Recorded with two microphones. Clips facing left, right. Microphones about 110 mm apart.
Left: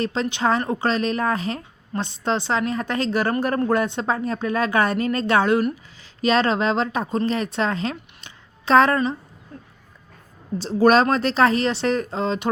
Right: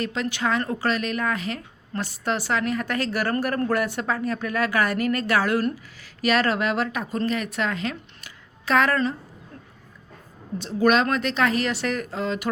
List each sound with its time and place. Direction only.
0.0 s a woman's voice: 30° left (ahead or behind)
10.6 s speech: 35° left (ahead or behind)